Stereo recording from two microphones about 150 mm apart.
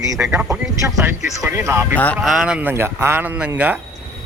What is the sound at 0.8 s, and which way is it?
Speech, 20° right (ahead or behind).